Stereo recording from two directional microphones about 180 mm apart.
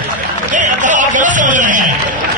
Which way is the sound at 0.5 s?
45° right (ahead or behind).